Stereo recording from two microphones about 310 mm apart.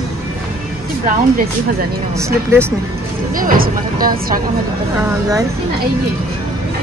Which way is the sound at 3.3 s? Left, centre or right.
Right.